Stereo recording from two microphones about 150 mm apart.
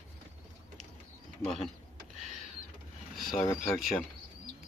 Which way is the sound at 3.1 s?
Centre (ahead or behind).